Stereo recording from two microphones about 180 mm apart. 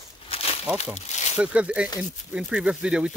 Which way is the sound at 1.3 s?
5° right (ahead or behind).